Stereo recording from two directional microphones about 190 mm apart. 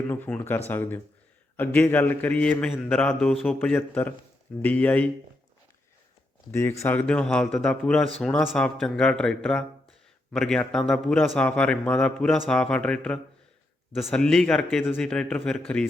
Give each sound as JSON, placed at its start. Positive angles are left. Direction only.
{"t": 0.1, "sound": "a man's voice", "side_deg": 10}
{"t": 6.5, "sound": "a man's voice", "side_deg": 15}